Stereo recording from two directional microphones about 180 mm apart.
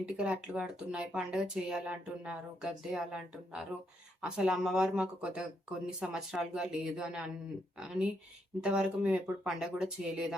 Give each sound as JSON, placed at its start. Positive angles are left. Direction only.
{"t": 0.0, "sound": "speech", "side_deg": -5}